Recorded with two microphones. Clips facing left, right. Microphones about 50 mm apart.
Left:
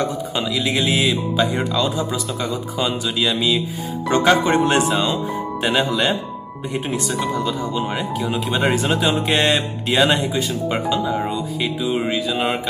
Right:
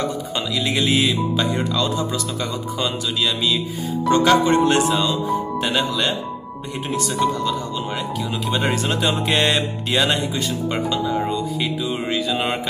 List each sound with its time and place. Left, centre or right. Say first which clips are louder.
0.4 s speech: left 2 dB; centre
0.7 s speech: right 1 dB; centre
4.1 s speech: even; left
11.6 s music: left 3 dB; centre